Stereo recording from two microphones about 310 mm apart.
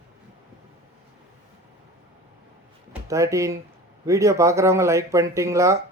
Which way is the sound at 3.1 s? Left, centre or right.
Centre.